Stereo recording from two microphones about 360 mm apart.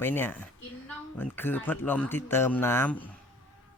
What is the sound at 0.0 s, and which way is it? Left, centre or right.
Speech, centre.